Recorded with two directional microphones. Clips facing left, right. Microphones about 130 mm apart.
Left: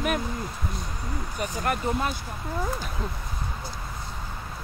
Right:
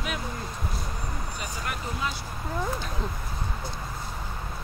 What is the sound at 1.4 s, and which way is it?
Speech, 45° left (ahead or behind).